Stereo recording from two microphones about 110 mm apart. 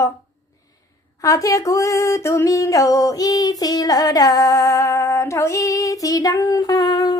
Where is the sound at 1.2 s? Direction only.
30° left (ahead or behind).